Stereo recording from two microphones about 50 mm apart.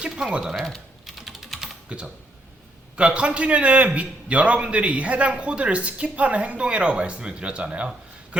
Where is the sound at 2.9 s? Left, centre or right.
Right.